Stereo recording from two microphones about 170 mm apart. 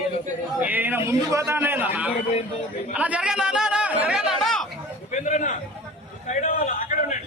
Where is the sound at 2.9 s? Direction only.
10° right (ahead or behind).